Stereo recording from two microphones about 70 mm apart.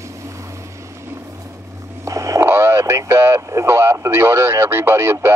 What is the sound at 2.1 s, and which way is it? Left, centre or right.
Speech, right.